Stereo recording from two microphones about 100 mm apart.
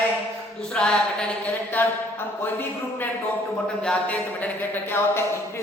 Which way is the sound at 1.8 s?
20° left (ahead or behind).